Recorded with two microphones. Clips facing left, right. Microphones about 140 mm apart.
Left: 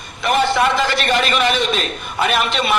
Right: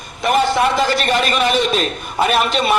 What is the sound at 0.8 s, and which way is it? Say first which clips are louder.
A man's voice: right 1 dB; 40° right (ahead or behind).